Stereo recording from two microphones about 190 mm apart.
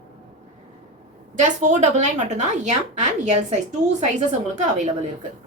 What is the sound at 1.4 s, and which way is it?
A woman's voice, 40° right (ahead or behind).